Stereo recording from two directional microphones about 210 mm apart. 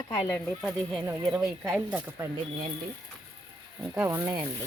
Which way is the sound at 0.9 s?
15° right (ahead or behind).